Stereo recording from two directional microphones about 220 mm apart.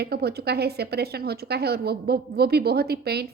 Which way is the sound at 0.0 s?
45° right (ahead or behind).